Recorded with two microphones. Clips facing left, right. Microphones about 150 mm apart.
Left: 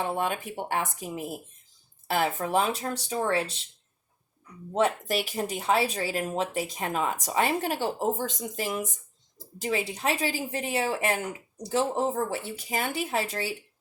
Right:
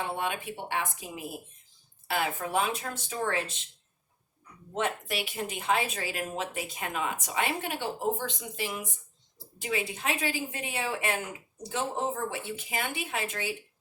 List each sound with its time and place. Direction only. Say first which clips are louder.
0.0 s speech: left 4 dB; 40° left (ahead or behind)
4.7 s speech: left 6 dB; 40° left (ahead or behind)